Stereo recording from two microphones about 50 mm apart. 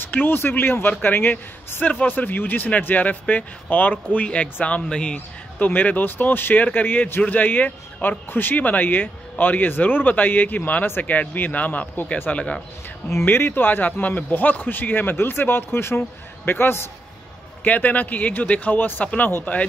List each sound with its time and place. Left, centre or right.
0.0 s a man's voice: left; by 5.2 s centre
5.6 s speech: left
13.2 s a man's voice: left
17.6 s speech: left